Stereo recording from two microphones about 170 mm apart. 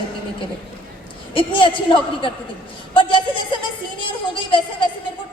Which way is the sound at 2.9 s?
30° left (ahead or behind).